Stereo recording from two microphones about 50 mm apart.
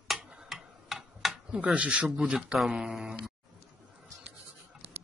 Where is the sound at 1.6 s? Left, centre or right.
Right.